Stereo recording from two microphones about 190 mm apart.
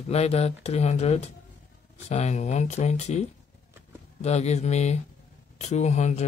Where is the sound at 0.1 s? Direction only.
35° left (ahead or behind).